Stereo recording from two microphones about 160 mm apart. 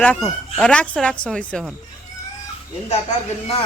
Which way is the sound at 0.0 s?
10° left (ahead or behind).